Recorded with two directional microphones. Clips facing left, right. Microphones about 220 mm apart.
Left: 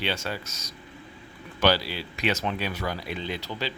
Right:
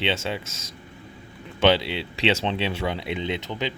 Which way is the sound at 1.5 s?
25° right (ahead or behind).